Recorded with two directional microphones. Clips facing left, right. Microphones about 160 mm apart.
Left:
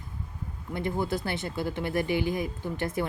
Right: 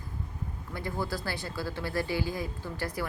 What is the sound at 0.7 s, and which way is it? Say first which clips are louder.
Speech: left 5 dB; 20° left (ahead or behind).